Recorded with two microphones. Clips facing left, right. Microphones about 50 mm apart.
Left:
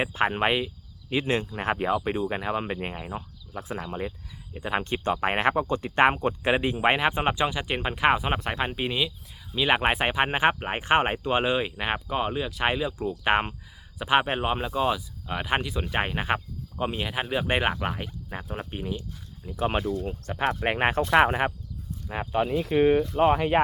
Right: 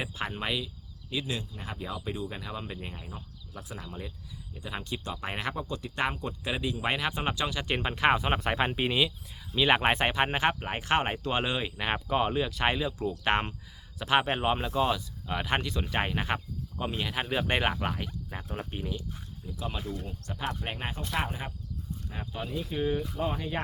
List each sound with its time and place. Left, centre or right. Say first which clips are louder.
0.0 s speech: left 9 dB; left
7.7 s speech: even; centre
11.9 s speech: right 4 dB; centre
19.5 s speech: left 10 dB; left
20.4 s speech: left 11 dB; left
21.1 s speech: left 12 dB; left
23.1 s speech: left 11 dB; left